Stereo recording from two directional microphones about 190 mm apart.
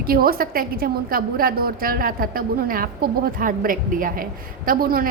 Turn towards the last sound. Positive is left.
turn(degrees=-50)  # may be behind; listen again after turning